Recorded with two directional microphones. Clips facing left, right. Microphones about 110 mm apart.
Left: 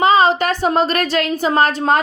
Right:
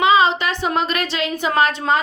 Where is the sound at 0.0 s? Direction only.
40° left (ahead or behind).